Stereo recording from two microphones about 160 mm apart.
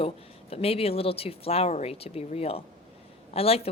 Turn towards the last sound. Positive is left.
turn(degrees=40)  # may be behind; listen again after turning